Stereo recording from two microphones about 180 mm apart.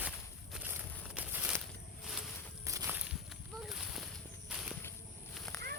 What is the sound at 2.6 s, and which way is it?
Walk, 15° right (ahead or behind).